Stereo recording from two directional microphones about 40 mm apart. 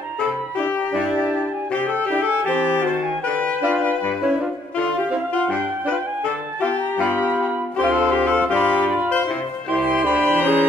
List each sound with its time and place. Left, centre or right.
2.1 s music: left
7.0 s music: right
7.8 s music: left
8.4 s saxophone: left
10.2 s music: right